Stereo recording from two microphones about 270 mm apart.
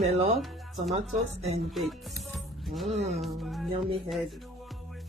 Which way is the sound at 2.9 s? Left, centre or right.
Right.